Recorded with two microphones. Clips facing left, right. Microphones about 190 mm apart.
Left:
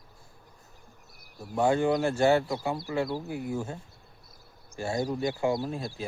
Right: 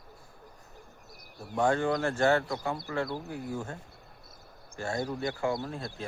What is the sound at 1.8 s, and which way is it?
Speech, 20° left (ahead or behind).